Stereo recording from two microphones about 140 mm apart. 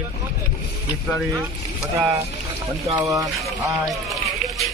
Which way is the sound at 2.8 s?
20° right (ahead or behind).